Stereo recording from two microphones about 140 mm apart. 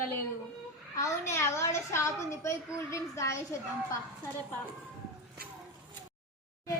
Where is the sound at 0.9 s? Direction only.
20° left (ahead or behind).